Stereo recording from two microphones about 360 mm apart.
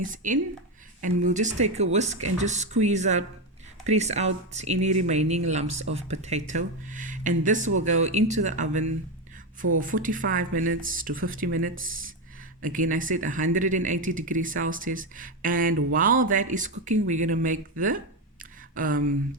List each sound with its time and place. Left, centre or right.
0.0 s speech: right
9.8 s speech: right